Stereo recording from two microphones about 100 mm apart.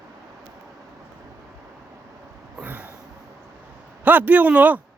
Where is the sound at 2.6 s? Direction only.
15° right (ahead or behind).